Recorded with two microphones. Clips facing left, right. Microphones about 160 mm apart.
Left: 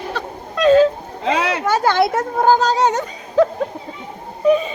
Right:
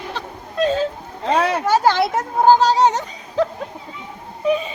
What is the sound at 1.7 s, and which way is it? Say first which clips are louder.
Speech: left 2 dB; 55° left (ahead or behind).